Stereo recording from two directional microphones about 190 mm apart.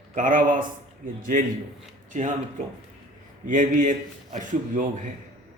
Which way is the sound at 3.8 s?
40° right (ahead or behind).